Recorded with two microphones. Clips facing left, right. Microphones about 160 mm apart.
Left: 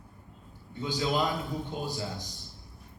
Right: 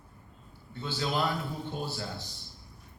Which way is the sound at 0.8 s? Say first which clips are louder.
Left 2 dB; 15° left (ahead or behind).